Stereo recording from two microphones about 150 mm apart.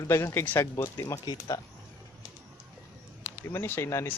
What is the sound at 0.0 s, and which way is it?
Speech, 20° left (ahead or behind).